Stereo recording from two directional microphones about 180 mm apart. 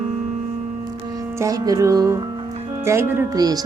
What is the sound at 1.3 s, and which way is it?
Speech, 20° right (ahead or behind).